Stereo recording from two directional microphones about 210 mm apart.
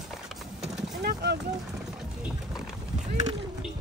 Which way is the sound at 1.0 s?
50° right (ahead or behind).